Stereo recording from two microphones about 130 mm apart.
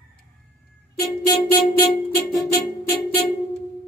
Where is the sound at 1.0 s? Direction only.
30° left (ahead or behind).